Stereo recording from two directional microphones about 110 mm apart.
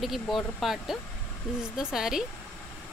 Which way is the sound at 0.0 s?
Centre (ahead or behind).